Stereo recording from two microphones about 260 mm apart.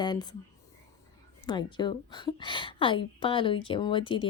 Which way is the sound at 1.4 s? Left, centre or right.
Centre.